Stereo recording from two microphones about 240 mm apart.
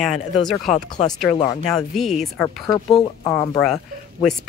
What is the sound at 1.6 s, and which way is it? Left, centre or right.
Speech, centre.